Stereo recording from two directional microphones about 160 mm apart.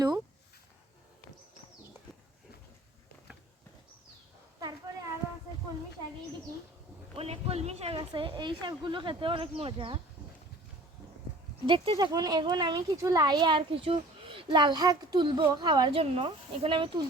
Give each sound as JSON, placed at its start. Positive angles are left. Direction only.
{"t": 7.2, "sound": "speech", "side_deg": -40}
{"t": 11.6, "sound": "speech", "side_deg": -30}